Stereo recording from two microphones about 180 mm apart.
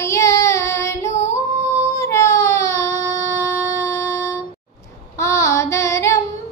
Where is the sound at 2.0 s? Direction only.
15° left (ahead or behind).